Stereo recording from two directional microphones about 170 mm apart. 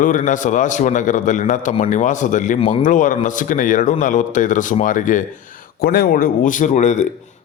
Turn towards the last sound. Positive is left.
turn(degrees=45)  # may be behind; listen again after turning